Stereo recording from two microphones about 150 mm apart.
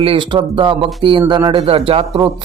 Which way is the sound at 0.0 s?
35° right (ahead or behind).